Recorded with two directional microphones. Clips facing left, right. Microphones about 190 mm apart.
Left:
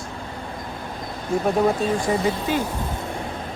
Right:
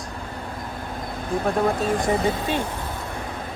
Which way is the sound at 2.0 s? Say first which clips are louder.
Even; 25° right (ahead or behind).